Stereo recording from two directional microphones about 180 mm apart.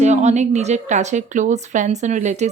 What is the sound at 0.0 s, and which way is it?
A woman's voice, 40° right (ahead or behind).